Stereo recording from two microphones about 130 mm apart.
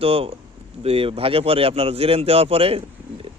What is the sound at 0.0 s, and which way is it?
Speech, 45° right (ahead or behind).